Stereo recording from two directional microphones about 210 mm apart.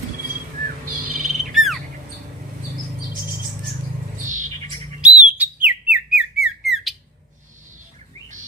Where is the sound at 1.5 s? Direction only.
Centre (ahead or behind).